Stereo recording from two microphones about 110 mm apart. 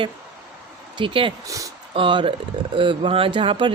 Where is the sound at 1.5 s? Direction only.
30° right (ahead or behind).